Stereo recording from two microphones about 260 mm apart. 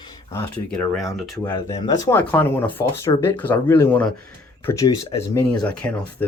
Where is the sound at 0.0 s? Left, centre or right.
Centre.